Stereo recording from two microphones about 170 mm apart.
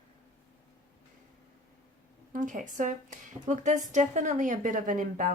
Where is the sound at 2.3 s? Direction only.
50° right (ahead or behind).